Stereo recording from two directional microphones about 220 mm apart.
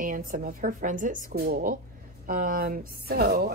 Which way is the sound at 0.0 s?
40° right (ahead or behind).